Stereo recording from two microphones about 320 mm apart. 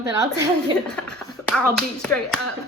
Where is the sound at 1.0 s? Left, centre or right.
Centre.